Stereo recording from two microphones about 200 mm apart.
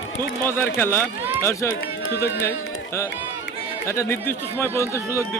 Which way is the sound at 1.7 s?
70° left (ahead or behind).